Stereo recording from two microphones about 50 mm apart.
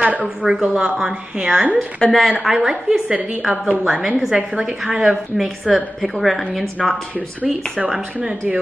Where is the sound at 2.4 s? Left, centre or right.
Centre.